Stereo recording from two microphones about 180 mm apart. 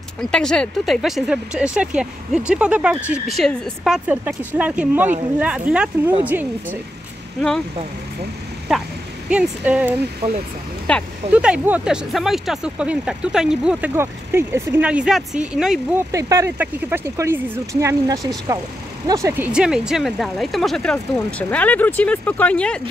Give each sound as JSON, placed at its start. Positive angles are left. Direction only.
{"t": 0.2, "sound": "speech", "side_deg": 5}
{"t": 8.7, "sound": "speech", "side_deg": 0}
{"t": 10.2, "sound": "speech", "side_deg": -30}
{"t": 10.9, "sound": "speech", "side_deg": 5}
{"t": 11.3, "sound": "speech", "side_deg": -5}
{"t": 16.1, "sound": "speech", "side_deg": -20}